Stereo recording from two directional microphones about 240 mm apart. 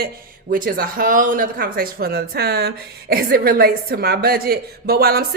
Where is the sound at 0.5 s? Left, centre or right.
Right.